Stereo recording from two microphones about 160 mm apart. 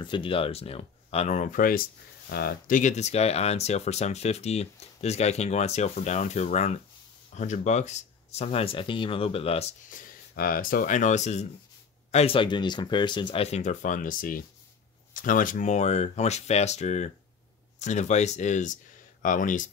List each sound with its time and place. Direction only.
0.0 s speech: 30° left (ahead or behind); by 1.8 s 60° left (ahead or behind)
2.2 s speech: 70° left (ahead or behind); by 9.8 s 40° left (ahead or behind)
9.8 s speech: 60° left (ahead or behind)